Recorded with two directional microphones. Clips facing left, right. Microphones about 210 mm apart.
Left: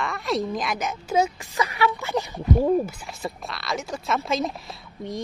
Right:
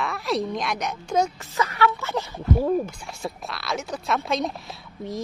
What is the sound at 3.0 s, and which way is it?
Speech, centre (ahead or behind).